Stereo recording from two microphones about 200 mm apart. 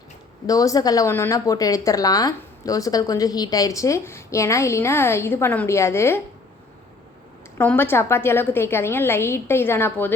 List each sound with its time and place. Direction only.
0.4 s a woman's voice: 15° left (ahead or behind)
7.6 s a woman's voice: 10° left (ahead or behind)